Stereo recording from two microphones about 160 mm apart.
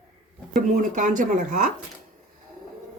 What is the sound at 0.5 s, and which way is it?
Speech, 55° right (ahead or behind).